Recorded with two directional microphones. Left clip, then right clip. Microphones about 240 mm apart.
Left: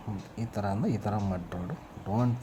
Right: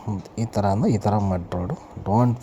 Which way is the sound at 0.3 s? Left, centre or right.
Right.